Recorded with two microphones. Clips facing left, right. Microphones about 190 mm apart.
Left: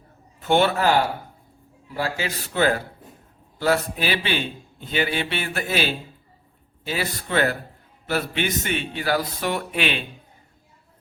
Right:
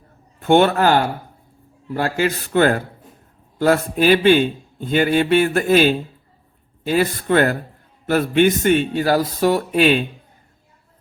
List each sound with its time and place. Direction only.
0.4 s a man's voice: 50° right (ahead or behind)